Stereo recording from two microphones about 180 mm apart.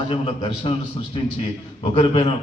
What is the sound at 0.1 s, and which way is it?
A man's voice, 25° left (ahead or behind).